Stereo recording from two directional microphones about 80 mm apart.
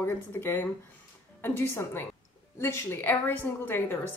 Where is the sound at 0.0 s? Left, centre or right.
Left.